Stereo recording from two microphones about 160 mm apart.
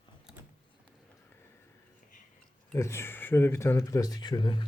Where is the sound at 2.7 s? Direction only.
15° left (ahead or behind).